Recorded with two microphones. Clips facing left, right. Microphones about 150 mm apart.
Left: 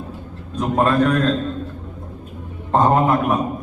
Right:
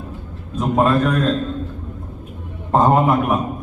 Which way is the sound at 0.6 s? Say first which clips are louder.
Even; 5° right (ahead or behind).